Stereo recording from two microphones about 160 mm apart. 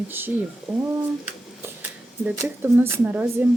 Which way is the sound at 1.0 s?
10° right (ahead or behind).